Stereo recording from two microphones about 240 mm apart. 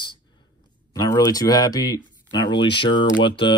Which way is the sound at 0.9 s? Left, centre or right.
Centre.